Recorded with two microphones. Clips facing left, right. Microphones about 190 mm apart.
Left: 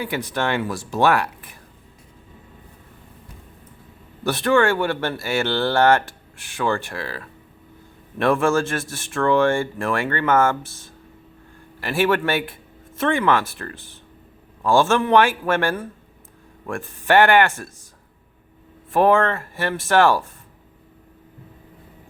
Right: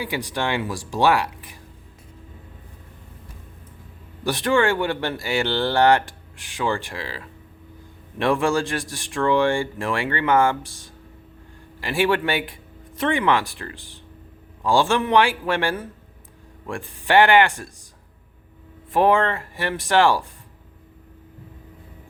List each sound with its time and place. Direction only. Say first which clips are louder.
0.0 s speech: left 2 dB; 15° right (ahead or behind)
4.2 s speech: left 2 dB; 15° right (ahead or behind)
18.9 s speech: left 2 dB; 15° right (ahead or behind)